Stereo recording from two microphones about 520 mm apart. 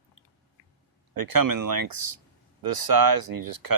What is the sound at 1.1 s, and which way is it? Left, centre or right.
Speech, right.